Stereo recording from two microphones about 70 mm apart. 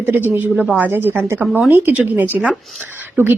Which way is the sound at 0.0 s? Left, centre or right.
Right.